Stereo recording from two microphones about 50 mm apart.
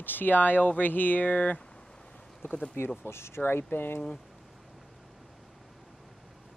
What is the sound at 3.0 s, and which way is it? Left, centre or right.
Speech, left.